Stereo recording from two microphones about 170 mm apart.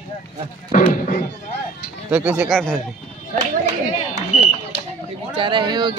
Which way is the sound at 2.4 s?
5° left (ahead or behind).